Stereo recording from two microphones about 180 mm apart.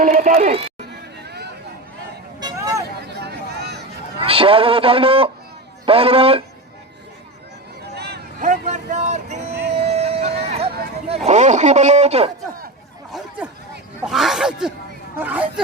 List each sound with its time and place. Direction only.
0.0 s speech: 50° right (ahead or behind)
2.4 s vehicle: 20° right (ahead or behind)
3.1 s a sound: 65° right (ahead or behind)
4.2 s a man's voice: 30° right (ahead or behind)
7.9 s a sound: 65° right (ahead or behind)
8.4 s a sound: 40° right (ahead or behind)
11.3 s a man's voice: 40° right (ahead or behind)
13.1 s chatter: centre (ahead or behind)
14.0 s speech: centre (ahead or behind)